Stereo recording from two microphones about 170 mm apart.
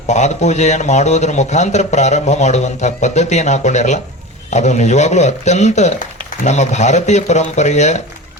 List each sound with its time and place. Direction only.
0.1 s a man's voice: 40° left (ahead or behind)